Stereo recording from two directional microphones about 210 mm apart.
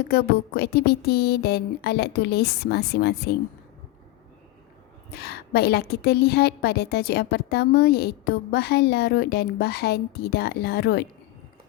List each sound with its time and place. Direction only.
0.1 s a woman's voice: 50° left (ahead or behind)
5.1 s a woman's voice: 50° left (ahead or behind)